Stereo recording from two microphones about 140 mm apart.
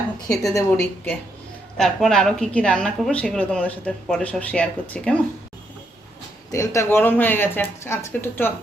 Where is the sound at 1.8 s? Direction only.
5° left (ahead or behind).